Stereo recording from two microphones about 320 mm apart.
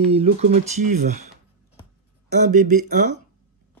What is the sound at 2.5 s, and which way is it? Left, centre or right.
Speech, right.